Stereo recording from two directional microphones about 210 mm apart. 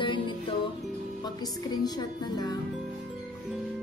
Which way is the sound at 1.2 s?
20° left (ahead or behind).